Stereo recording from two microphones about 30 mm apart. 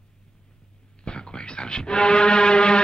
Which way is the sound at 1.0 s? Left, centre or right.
Left.